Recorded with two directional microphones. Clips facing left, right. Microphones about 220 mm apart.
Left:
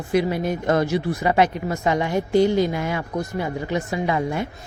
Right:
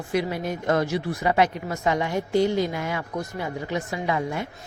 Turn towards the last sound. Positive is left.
turn(degrees=25)  # may be behind; listen again after turning